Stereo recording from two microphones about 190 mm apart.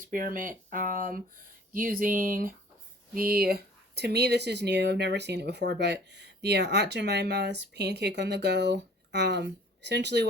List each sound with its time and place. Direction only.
0.0 s speech: 45° right (ahead or behind); by 10.2 s 65° right (ahead or behind)